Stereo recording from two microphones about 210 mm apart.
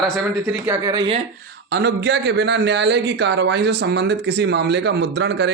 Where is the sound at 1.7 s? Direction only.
50° right (ahead or behind).